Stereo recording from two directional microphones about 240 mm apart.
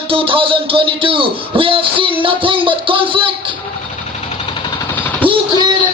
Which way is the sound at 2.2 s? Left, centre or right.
Right.